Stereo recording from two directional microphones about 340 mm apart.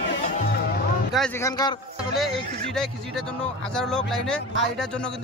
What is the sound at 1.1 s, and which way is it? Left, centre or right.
Music, centre.